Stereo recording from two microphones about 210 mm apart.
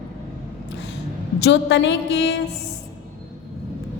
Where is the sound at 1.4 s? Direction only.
55° left (ahead or behind).